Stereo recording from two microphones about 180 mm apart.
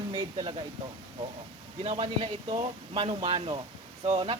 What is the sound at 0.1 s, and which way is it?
Speech, 25° right (ahead or behind).